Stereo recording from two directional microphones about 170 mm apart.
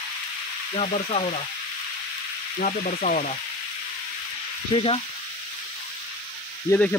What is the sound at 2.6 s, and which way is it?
Frying, 50° left (ahead or behind).